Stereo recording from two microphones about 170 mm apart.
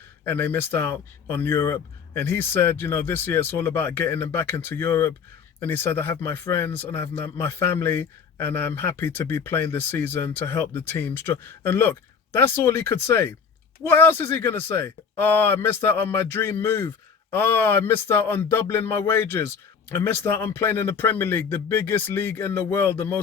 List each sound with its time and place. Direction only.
0.3 s speech: 10° left (ahead or behind)